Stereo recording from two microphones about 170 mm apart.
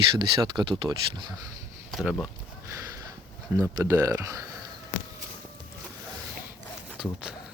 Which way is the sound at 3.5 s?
15° right (ahead or behind).